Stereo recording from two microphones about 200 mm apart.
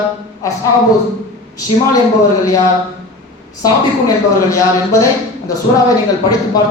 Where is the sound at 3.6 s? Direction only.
15° left (ahead or behind).